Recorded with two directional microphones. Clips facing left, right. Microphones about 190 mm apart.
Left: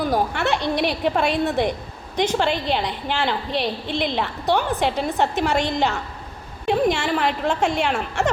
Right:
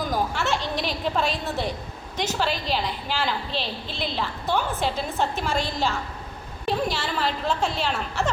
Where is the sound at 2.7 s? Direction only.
65° left (ahead or behind).